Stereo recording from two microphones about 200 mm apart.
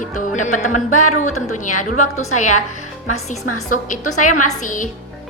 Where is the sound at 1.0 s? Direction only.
90° left.